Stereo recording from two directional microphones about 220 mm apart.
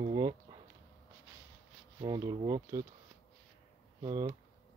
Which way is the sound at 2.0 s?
20° right (ahead or behind).